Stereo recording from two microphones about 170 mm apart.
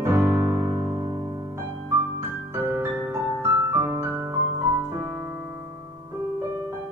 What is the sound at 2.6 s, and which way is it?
Music, 15° right (ahead or behind).